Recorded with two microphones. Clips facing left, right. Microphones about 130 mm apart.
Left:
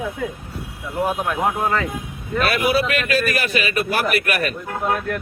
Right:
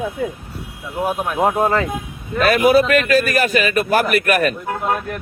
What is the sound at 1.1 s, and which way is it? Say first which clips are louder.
Speech: right 3 dB; 5° right (ahead or behind).